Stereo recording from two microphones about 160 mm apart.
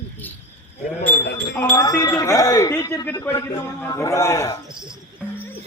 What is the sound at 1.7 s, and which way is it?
A man's voice, 25° left (ahead or behind).